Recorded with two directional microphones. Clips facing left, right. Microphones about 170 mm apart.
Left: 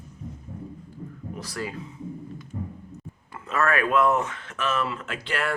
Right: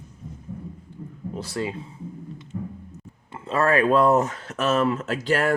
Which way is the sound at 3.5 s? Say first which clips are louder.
Right 4 dB; 30° right (ahead or behind).